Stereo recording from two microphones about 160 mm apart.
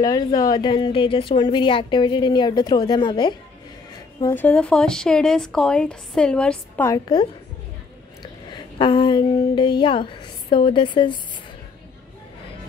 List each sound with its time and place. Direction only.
0.0 s a woman's voice: 25° left (ahead or behind)
4.2 s a woman's voice: 15° left (ahead or behind)
6.9 s a woman's voice: 25° left (ahead or behind)
8.2 s a sound: 30° left (ahead or behind)